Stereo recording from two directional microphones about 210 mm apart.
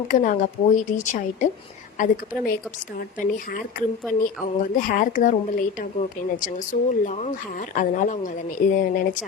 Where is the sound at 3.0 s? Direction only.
40° left (ahead or behind).